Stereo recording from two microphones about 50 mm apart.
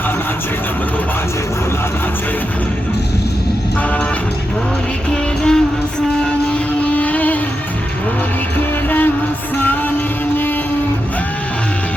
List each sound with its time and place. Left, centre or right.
5.1 s music: centre
6.5 s music: left